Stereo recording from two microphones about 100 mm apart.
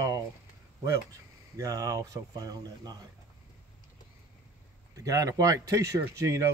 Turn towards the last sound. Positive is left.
turn(degrees=-30)  # may be behind; listen again after turning